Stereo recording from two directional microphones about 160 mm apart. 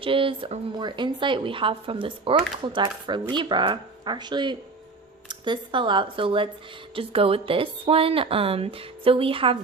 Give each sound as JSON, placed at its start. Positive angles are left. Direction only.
{"t": 0.0, "sound": "speech", "side_deg": -35}